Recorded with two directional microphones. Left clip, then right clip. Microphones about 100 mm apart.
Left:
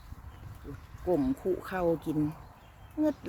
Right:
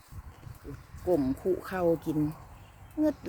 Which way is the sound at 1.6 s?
20° right (ahead or behind).